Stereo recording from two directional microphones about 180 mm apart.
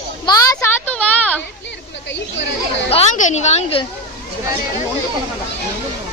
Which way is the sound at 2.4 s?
80° left.